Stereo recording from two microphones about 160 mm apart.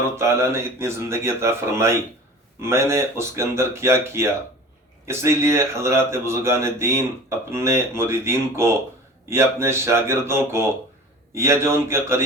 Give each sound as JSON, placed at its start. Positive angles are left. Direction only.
{"t": 0.2, "sound": "speech", "side_deg": -15}